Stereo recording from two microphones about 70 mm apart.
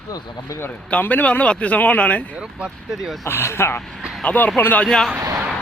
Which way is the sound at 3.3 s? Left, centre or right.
Left.